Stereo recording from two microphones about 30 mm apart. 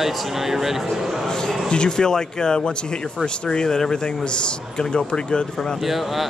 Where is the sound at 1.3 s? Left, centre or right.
Left.